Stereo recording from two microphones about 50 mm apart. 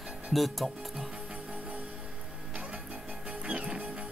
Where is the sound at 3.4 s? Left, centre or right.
Centre.